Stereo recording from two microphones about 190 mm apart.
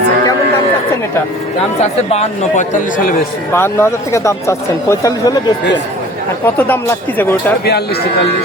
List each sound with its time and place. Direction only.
1.8 s speech: 35° left (ahead or behind)
3.5 s speech: 15° left (ahead or behind)